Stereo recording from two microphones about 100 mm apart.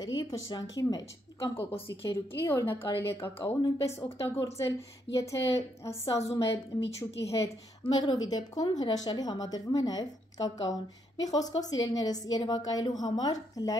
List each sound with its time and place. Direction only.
0.0 s a woman's voice: 40° left (ahead or behind)
8.0 s a woman's voice: 45° left (ahead or behind)